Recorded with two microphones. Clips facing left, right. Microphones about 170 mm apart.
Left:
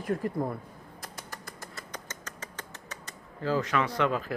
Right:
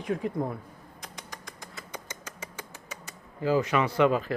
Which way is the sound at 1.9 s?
10° right (ahead or behind).